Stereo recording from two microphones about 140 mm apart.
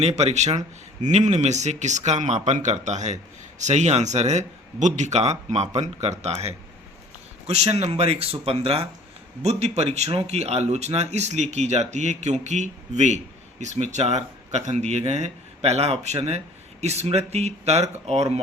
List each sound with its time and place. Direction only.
0.0 s a man's voice: 50° right (ahead or behind)